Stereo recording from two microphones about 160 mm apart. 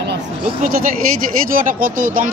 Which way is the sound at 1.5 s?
60° right (ahead or behind).